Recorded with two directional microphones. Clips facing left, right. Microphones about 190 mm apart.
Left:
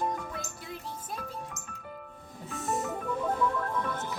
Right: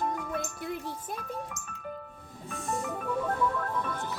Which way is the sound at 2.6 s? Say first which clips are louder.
Left 2 dB; 20° left (ahead or behind).